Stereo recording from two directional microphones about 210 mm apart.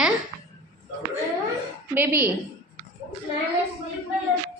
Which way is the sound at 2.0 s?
10° right (ahead or behind).